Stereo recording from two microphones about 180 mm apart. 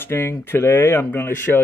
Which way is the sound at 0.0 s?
15° left (ahead or behind).